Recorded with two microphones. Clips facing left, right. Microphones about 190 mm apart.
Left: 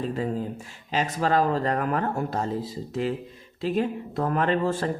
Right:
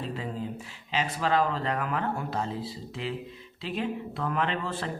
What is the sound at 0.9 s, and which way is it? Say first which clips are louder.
Speech: left 3 dB; 45° left (ahead or behind).